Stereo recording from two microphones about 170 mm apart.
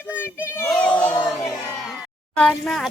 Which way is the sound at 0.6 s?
5° left (ahead or behind).